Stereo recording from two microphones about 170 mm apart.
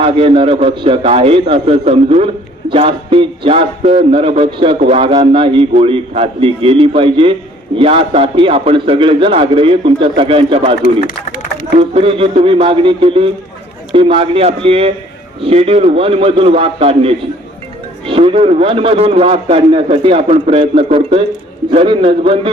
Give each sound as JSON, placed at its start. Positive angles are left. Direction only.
{"t": 0.0, "sound": "a man's voice", "side_deg": -30}
{"t": 10.8, "sound": "speech", "side_deg": 55}
{"t": 11.8, "sound": "a man's voice", "side_deg": -30}